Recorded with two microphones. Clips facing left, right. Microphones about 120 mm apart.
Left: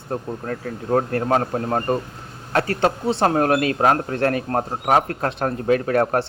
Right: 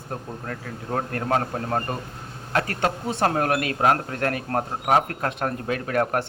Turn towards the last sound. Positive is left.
turn(degrees=35)  # may be behind; listen again after turning